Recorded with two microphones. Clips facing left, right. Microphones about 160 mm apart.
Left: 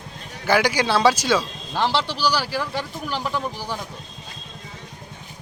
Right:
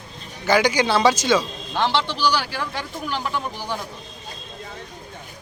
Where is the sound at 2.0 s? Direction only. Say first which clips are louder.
Right 1 dB; 35° left (ahead or behind).